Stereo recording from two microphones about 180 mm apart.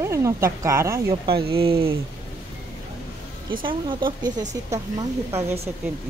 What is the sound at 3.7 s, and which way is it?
A woman's voice, 25° right (ahead or behind).